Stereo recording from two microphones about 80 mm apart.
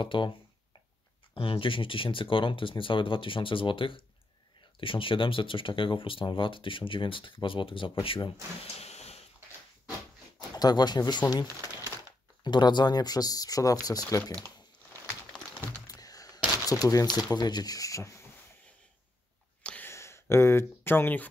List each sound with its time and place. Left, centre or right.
0.0 s speech: left
1.3 s speech: left
10.5 s speech: left
12.4 s speech: left
15.9 s a sound: left
17.2 s speech: left
19.8 s speech: left